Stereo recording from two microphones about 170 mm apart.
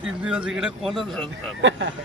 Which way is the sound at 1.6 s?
90° right.